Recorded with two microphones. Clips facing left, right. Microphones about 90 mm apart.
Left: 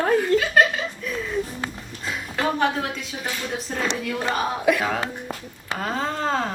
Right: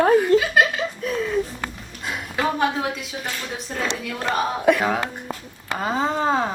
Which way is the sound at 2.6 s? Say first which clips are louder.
Right 1 dB; 5° right (ahead or behind).